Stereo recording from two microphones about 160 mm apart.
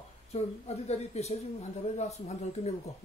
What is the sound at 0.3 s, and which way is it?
Speech, 40° left (ahead or behind).